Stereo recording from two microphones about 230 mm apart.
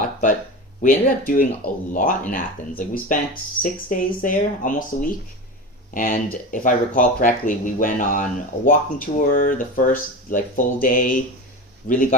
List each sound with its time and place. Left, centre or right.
0.8 s speech: left